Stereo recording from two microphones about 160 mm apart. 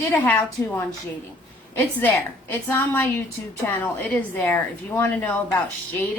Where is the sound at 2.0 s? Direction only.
10° left (ahead or behind).